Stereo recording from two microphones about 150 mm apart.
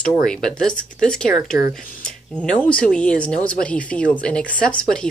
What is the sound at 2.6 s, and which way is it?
Speech, 5° left (ahead or behind).